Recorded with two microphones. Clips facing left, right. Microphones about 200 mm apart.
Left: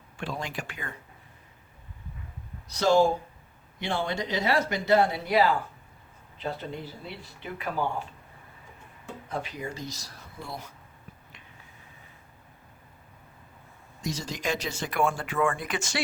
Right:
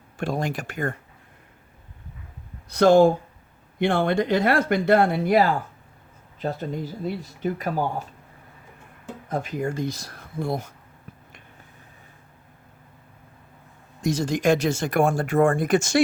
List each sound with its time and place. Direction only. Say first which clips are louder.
0.2 s speech: right 8 dB; 45° right (ahead or behind)
2.6 s speech: right 7 dB; 55° right (ahead or behind)
9.3 s speech: right 8 dB; 45° right (ahead or behind)
14.0 s speech: right 10 dB; 50° right (ahead or behind)